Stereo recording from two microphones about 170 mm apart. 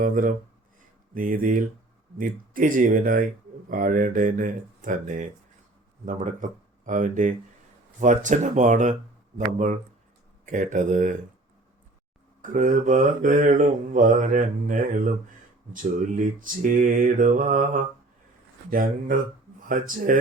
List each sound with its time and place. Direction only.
0.0 s mantra: 50° right (ahead or behind)
1.1 s speech: 55° right (ahead or behind)
2.1 s mantra: 50° right (ahead or behind)
10.4 s mantra: 50° right (ahead or behind)
12.4 s mantra: 50° right (ahead or behind)
18.7 s speech: 55° right (ahead or behind)
19.6 s mantra: 55° right (ahead or behind)